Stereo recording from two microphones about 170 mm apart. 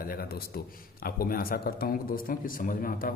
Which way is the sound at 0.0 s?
60° left (ahead or behind).